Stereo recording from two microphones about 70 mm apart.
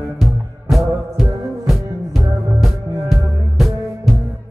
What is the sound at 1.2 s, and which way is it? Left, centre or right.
Music, centre.